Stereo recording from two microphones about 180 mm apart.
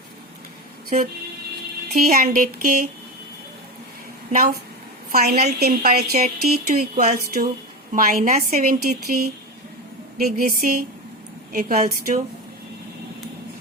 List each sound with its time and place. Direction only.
0.9 s a woman's voice: 45° right (ahead or behind)
4.3 s a woman's voice: 50° right (ahead or behind)
10.2 s speech: 60° right (ahead or behind)